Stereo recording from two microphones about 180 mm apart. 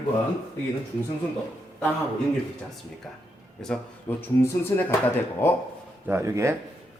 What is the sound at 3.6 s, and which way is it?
A man's voice, 5° left (ahead or behind).